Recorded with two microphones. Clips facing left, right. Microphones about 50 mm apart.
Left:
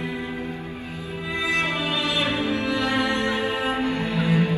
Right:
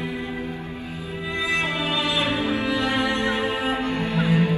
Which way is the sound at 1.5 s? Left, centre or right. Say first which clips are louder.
Right 1 dB; right.